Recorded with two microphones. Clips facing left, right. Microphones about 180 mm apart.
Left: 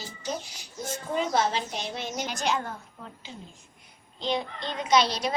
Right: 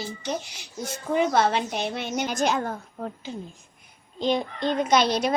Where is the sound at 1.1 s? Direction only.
65° right (ahead or behind).